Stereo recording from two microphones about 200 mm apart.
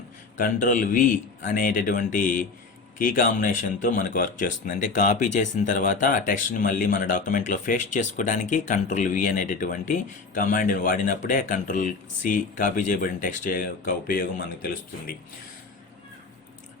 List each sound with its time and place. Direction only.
0.3 s a man's voice: 40° left (ahead or behind)